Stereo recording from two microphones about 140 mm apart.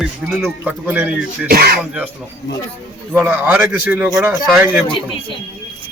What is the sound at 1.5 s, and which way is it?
Speech, 90° right.